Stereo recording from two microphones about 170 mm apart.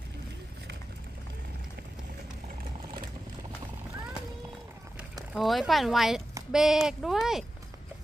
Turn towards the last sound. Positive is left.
turn(degrees=0)  # may be behind; listen again after turning